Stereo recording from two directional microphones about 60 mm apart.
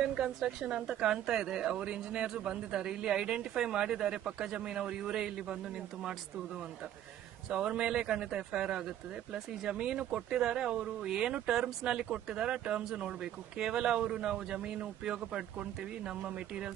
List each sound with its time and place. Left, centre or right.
0.0 s speech: centre
7.7 s speech: centre